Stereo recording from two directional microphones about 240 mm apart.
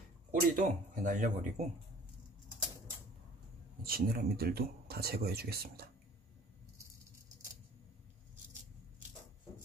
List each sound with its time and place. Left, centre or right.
0.3 s speech: right
3.8 s speech: right